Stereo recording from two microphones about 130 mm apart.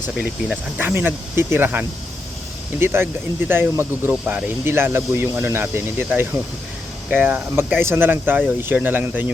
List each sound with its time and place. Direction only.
0.2 s speech: 15° right (ahead or behind)
2.8 s speech: 15° right (ahead or behind)